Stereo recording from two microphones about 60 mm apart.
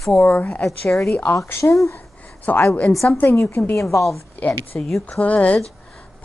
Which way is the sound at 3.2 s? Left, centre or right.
Left.